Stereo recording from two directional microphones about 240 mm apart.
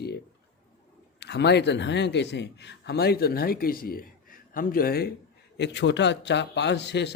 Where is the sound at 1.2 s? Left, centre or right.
Left.